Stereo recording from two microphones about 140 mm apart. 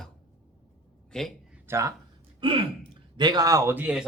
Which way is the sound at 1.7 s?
20° right (ahead or behind).